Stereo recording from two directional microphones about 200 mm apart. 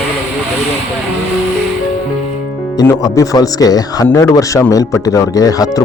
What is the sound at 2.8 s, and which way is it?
Speech, 15° left (ahead or behind).